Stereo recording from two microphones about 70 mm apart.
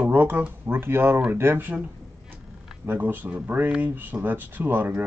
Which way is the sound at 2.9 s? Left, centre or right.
Right.